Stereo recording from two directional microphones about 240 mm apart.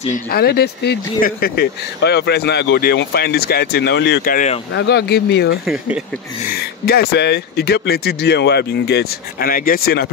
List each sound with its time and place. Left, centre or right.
0.1 s speech: left
5.7 s speech: centre
6.4 s speech: left